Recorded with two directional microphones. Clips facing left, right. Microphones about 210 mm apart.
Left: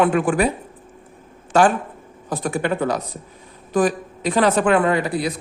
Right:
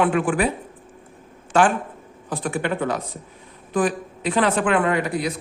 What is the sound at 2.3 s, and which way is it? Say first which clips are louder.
Speech: left 2 dB; 40° left (ahead or behind).